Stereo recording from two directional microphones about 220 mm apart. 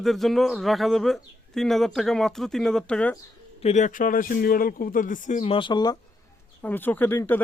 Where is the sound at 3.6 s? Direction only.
30° left (ahead or behind).